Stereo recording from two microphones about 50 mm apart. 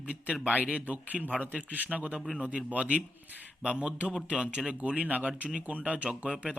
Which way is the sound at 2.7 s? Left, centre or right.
Right.